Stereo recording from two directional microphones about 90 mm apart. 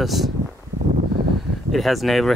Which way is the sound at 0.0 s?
Centre (ahead or behind).